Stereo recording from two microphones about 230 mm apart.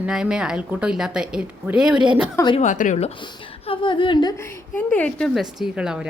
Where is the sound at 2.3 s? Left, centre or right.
Centre.